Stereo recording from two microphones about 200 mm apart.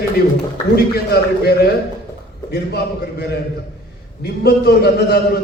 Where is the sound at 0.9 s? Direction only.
50° left (ahead or behind).